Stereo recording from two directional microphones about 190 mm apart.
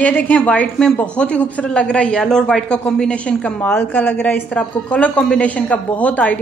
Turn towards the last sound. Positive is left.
turn(degrees=10)  # may be behind; listen again after turning